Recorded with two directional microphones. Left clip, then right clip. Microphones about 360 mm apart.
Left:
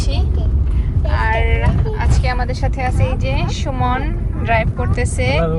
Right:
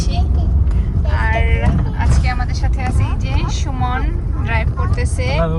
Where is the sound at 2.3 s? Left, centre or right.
Centre.